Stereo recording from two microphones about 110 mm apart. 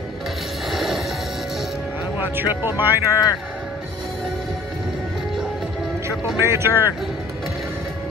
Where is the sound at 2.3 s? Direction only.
20° right (ahead or behind).